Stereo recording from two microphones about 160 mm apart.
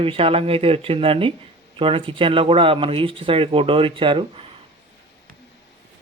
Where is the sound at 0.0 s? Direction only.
35° right (ahead or behind).